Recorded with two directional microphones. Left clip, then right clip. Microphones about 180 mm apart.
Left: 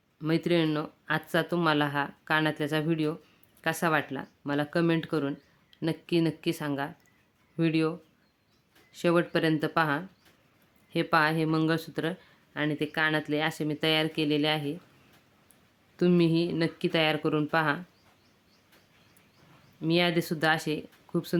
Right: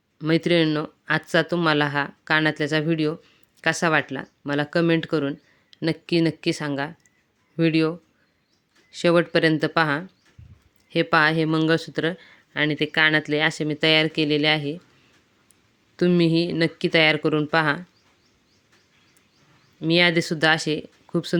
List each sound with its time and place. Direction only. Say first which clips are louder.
0.2 s speech: right 7 dB; 25° right (ahead or behind)
16.0 s speech: right 5 dB; 25° right (ahead or behind)
19.8 s speech: right 7 dB; 25° right (ahead or behind)